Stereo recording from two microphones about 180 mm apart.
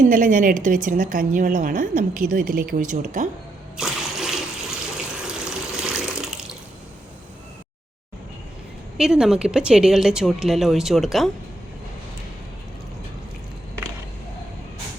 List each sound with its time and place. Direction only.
0.0 s a woman's voice: 45° right (ahead or behind)
3.8 s a sound: centre (ahead or behind)
5.5 s water: 5° right (ahead or behind)
9.0 s a woman's voice: 5° right (ahead or behind)